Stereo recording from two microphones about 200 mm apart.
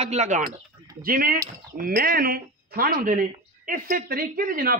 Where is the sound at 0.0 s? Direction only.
35° right (ahead or behind).